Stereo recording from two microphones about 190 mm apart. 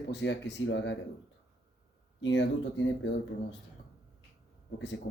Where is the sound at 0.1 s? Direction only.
65° left (ahead or behind).